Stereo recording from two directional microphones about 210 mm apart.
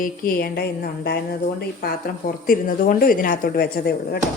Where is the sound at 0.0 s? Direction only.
45° left (ahead or behind).